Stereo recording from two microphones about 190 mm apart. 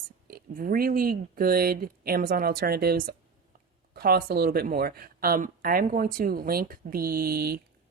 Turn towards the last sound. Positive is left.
turn(degrees=-55)  # may be behind; listen again after turning